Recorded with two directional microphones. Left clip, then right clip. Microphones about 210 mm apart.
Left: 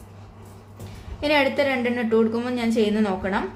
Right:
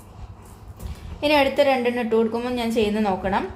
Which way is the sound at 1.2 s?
15° right (ahead or behind).